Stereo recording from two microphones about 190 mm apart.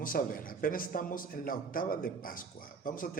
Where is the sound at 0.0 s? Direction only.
50° left (ahead or behind).